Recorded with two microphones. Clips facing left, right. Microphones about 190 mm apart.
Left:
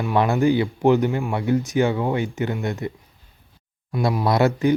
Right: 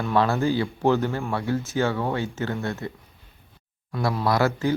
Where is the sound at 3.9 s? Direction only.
15° left (ahead or behind).